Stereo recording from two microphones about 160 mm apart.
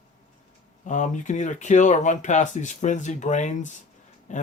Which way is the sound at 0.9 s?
50° left (ahead or behind).